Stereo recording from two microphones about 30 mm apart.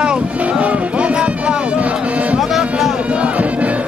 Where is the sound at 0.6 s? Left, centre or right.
Right.